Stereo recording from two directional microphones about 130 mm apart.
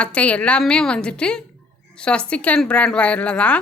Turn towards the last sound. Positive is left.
turn(degrees=10)  # may be behind; listen again after turning